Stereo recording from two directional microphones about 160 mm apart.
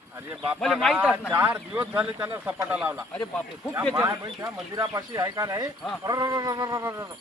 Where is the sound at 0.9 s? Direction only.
10° right (ahead or behind).